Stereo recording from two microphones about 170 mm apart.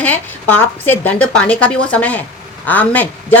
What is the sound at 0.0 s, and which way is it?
Speech, 10° left (ahead or behind).